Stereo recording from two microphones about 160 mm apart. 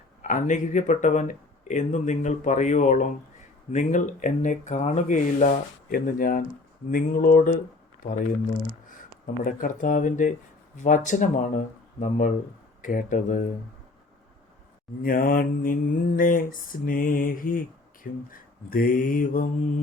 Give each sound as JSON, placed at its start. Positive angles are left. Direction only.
{"t": 0.2, "sound": "speech", "side_deg": 50}
{"t": 6.9, "sound": "mantra", "side_deg": 60}
{"t": 9.2, "sound": "mantra", "side_deg": 60}
{"t": 10.8, "sound": "speech", "side_deg": 50}
{"t": 12.8, "sound": "mantra", "side_deg": 55}
{"t": 15.0, "sound": "mantra", "side_deg": 65}